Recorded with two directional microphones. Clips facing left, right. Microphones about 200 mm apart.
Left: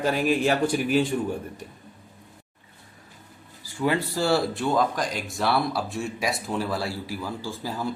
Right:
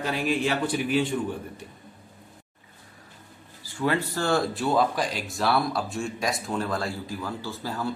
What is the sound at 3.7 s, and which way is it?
Speech, 10° left (ahead or behind).